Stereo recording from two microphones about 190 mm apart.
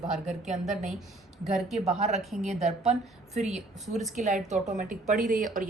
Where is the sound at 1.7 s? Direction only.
35° right (ahead or behind).